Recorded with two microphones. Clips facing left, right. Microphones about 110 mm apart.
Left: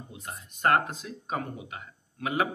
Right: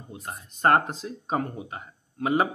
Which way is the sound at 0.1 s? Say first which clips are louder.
Right 3 dB; 35° right (ahead or behind).